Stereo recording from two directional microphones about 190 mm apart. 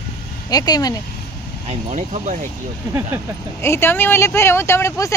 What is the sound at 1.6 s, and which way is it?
Speech, 40° right (ahead or behind).